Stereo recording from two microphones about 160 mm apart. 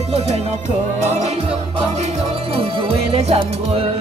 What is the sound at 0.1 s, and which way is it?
Music, 40° right (ahead or behind).